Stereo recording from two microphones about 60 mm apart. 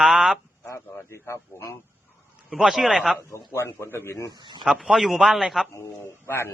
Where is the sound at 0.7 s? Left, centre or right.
Left.